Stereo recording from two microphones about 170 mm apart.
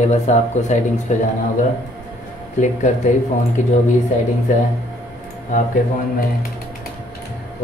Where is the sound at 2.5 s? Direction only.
45° left (ahead or behind).